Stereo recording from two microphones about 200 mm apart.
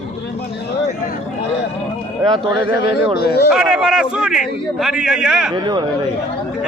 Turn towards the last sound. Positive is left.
turn(degrees=-20)  # may be behind; listen again after turning